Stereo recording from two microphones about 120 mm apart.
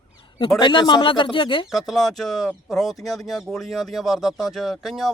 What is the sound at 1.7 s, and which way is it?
Speech, centre (ahead or behind).